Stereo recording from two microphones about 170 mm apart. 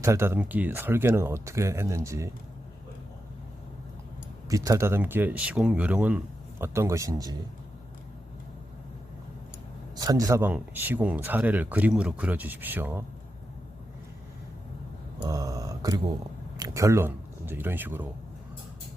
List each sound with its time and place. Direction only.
0.0 s speech: 15° right (ahead or behind)
4.4 s speech: 20° right (ahead or behind)
9.9 s speech: 20° right (ahead or behind)
15.2 s speech: 20° right (ahead or behind)